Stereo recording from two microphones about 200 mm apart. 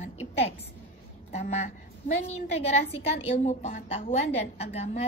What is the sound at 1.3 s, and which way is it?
A woman's voice, 35° left (ahead or behind).